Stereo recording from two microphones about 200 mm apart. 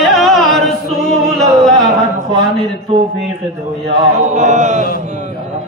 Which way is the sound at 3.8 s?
35° right (ahead or behind).